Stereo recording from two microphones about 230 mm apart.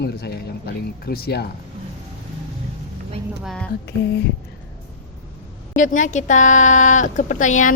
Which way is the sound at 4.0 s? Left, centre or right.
Left.